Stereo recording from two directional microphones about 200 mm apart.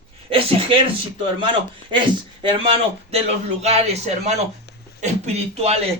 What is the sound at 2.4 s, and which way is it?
A man's voice, 25° right (ahead or behind).